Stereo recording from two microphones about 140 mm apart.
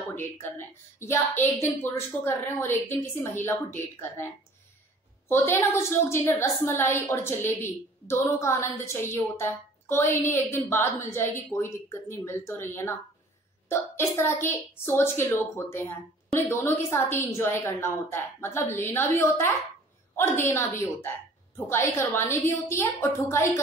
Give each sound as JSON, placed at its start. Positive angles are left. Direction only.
{"t": 0.1, "sound": "a woman's voice", "side_deg": 15}
{"t": 5.3, "sound": "a woman's voice", "side_deg": 20}